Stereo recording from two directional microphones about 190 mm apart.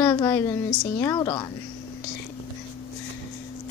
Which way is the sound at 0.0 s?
15° left (ahead or behind).